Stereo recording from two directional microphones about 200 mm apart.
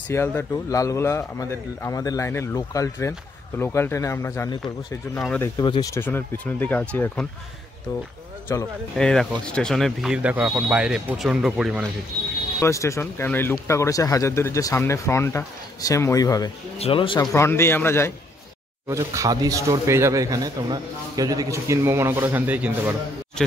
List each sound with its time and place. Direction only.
0.1 s speech: 10° left (ahead or behind)
5.6 s speech: 20° left (ahead or behind); by 7.2 s 5° left (ahead or behind)
8.5 s speech: 15° left (ahead or behind)
8.9 s speech: centre (ahead or behind)
12.5 s speech: 15° left (ahead or behind)
16.7 s speech: 30° left (ahead or behind)
17.3 s speech: 15° left (ahead or behind)
18.9 s speech: 15° right (ahead or behind)